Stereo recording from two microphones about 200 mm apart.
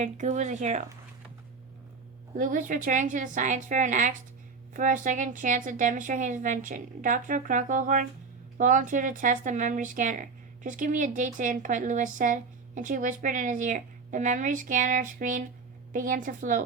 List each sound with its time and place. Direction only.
0.0 s speech: 35° right (ahead or behind)
2.3 s speech: 40° right (ahead or behind)